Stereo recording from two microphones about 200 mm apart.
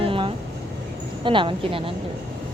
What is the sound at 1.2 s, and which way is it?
Speech, 25° right (ahead or behind).